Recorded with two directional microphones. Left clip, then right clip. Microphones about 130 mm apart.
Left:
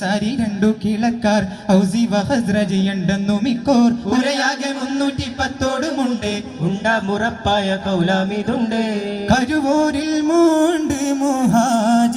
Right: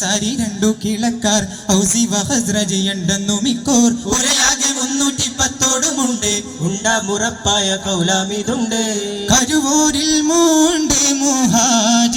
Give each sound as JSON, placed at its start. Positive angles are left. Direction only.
{"t": 0.1, "sound": "music", "side_deg": 20}
{"t": 10.4, "sound": "music", "side_deg": 50}